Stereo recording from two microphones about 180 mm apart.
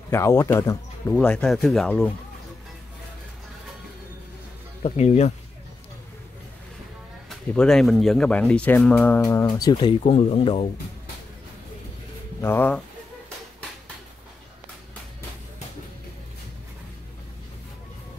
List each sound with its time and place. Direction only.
0.1 s speech: 15° left (ahead or behind)
1.1 s speech: 5° left (ahead or behind)
4.8 s speech: 40° left (ahead or behind)
7.2 s speech: 5° left (ahead or behind); by 10.7 s 30° left (ahead or behind)
12.4 s speech: 10° left (ahead or behind)